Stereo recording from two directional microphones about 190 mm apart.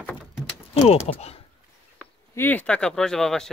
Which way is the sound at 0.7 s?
35° left (ahead or behind).